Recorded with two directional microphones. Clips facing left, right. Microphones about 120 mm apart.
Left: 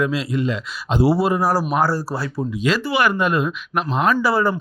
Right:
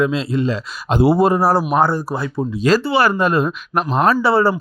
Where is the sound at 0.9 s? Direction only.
55° right (ahead or behind).